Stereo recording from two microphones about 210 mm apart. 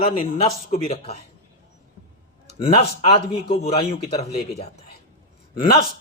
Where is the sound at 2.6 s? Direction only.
25° left (ahead or behind).